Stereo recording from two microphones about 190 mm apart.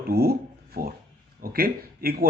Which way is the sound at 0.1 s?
55° right (ahead or behind).